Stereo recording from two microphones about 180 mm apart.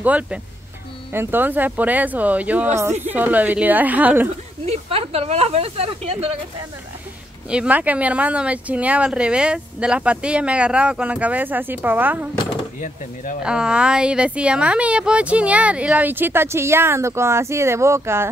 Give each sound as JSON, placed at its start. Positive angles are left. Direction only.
{"t": 0.0, "sound": "speech", "side_deg": -10}
{"t": 4.6, "sound": "speech", "side_deg": -35}
{"t": 7.4, "sound": "speech", "side_deg": -5}
{"t": 12.8, "sound": "speech", "side_deg": 45}
{"t": 13.4, "sound": "speech", "side_deg": -5}